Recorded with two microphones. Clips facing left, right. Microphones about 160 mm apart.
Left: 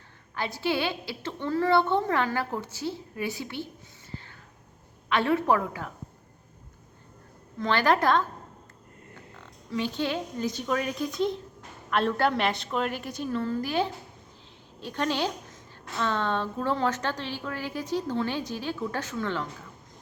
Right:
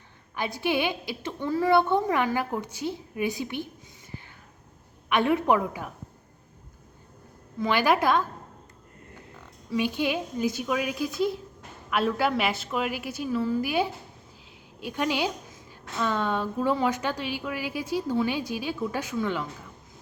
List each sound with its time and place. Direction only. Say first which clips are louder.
0.3 s a woman's voice: right 1 dB; 15° right (ahead or behind)
4.1 s a sound: left 1 dB; 15° right (ahead or behind)
5.0 s a woman's voice: right 1 dB; 15° right (ahead or behind)
7.6 s a woman's voice: right 1 dB; 10° right (ahead or behind)
9.6 s a woman's voice: right 3 dB; 10° right (ahead or behind)